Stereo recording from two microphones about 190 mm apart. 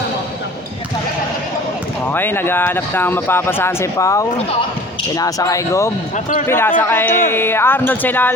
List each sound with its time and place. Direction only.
2.1 s speech: 10° left (ahead or behind)